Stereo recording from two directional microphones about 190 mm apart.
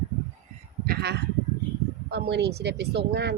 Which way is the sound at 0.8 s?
55° right (ahead or behind).